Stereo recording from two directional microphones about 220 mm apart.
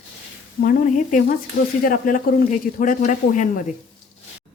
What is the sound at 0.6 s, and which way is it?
Speech, 40° left (ahead or behind).